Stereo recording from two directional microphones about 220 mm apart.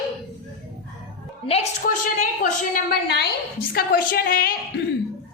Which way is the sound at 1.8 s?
40° left (ahead or behind).